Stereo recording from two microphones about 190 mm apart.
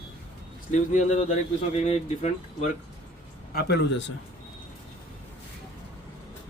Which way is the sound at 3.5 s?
65° left (ahead or behind).